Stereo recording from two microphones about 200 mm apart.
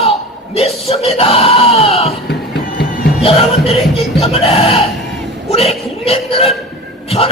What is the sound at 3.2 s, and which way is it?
Speech, 30° left (ahead or behind).